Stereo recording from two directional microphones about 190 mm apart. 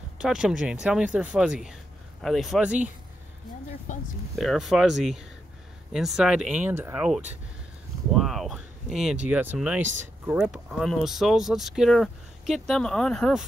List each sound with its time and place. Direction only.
0.2 s speech: 5° right (ahead or behind)
3.9 s speech: 40° left (ahead or behind)
4.4 s speech: centre (ahead or behind)